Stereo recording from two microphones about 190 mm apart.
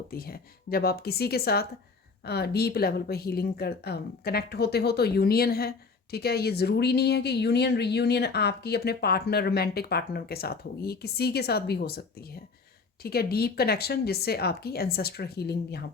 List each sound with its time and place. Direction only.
0.1 s speech: 55° left (ahead or behind)